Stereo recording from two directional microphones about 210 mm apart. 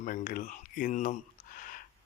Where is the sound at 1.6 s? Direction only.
40° left (ahead or behind).